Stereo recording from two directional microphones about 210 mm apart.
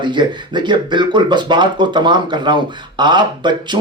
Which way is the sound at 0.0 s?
20° right (ahead or behind).